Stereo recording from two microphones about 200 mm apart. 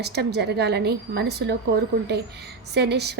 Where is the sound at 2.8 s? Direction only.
55° right (ahead or behind).